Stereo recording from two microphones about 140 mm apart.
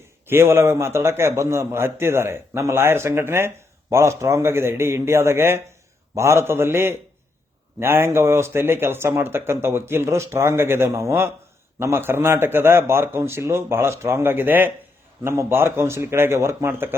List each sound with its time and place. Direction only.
0.3 s a man's voice: 15° right (ahead or behind)